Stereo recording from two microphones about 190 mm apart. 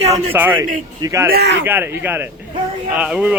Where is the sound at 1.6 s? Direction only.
10° right (ahead or behind).